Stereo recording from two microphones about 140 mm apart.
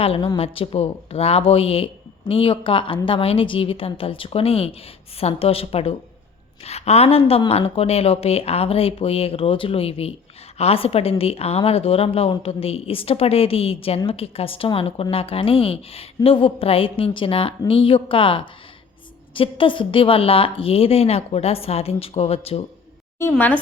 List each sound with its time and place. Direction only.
0.0 s a woman's voice: 45° left (ahead or behind)
23.3 s speech: 15° left (ahead or behind)